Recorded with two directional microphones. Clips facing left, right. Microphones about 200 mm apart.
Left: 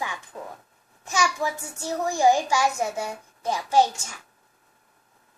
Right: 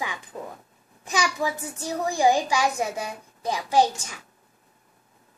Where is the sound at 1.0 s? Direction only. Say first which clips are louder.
Even; 15° right (ahead or behind).